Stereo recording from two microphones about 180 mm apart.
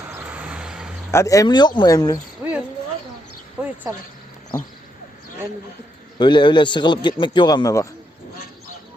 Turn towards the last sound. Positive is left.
turn(degrees=20)  # may be behind; listen again after turning